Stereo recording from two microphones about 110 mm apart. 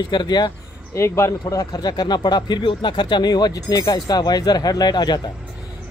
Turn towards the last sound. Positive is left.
turn(degrees=40)  # may be behind; listen again after turning